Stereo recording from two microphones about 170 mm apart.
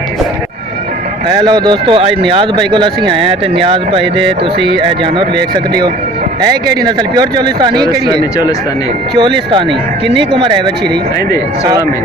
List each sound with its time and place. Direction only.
1.4 s speech: 25° right (ahead or behind)
9.1 s speech: 30° right (ahead or behind)
11.6 s speech: 20° right (ahead or behind)